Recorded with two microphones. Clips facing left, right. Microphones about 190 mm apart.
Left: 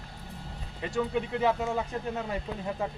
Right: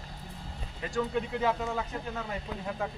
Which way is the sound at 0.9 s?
10° left (ahead or behind).